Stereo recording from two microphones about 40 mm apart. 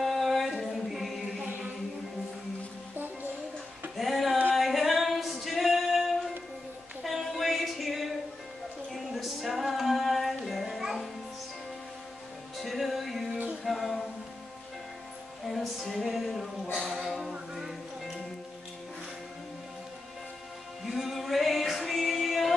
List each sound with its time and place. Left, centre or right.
0.0 s a capella: centre
3.9 s a sound: centre
4.6 s music: centre
7.0 s a sound: centre
8.9 s music: centre
12.5 s music: centre
15.4 s music: centre
16.7 s a sound: centre
17.3 s music: centre
20.8 s music: centre